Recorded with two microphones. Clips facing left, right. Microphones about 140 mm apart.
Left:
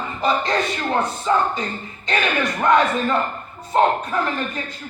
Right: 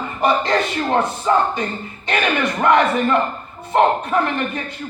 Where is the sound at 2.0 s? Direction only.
65° right (ahead or behind).